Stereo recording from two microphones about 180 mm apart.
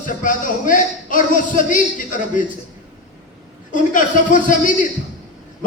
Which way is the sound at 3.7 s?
45° left (ahead or behind).